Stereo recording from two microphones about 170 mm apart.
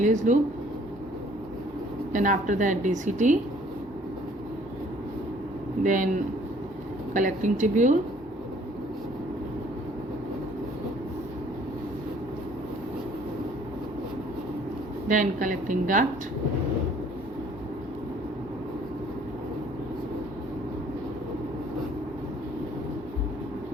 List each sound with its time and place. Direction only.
0.0 s speech: 45° right (ahead or behind)
2.1 s a woman's voice: 50° right (ahead or behind)
5.8 s a woman's voice: 50° right (ahead or behind)
7.1 s a woman's voice: 50° right (ahead or behind)
15.0 s a woman's voice: 50° right (ahead or behind)